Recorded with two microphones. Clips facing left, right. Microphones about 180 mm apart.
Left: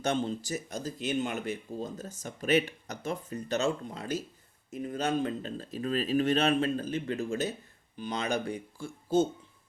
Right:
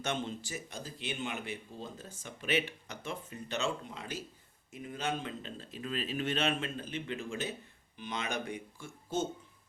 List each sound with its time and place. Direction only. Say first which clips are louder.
0.0 s speech: left 6 dB; 35° left (ahead or behind)